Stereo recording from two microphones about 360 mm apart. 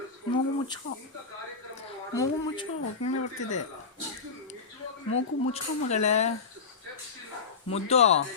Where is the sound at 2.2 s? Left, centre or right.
Centre.